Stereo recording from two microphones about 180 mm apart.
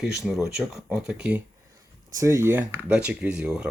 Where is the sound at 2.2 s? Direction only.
15° right (ahead or behind).